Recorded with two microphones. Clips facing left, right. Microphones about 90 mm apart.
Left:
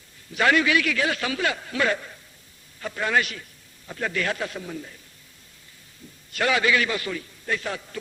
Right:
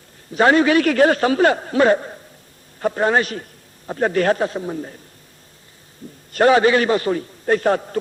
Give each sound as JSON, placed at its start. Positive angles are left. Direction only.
{"t": 0.3, "sound": "a man's voice", "side_deg": -35}
{"t": 6.3, "sound": "a man's voice", "side_deg": -40}